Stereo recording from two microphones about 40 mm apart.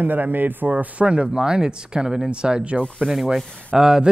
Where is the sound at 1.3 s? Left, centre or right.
Centre.